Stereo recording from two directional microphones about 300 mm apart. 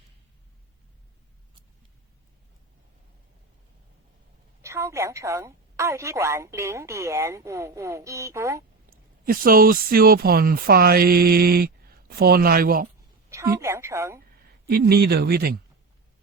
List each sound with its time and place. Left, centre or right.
4.6 s a woman's voice: centre
8.9 s speech: right
13.3 s a woman's voice: centre
14.3 s speech: right